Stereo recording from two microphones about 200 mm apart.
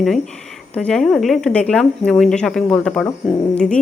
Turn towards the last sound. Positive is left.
turn(degrees=5)  # may be behind; listen again after turning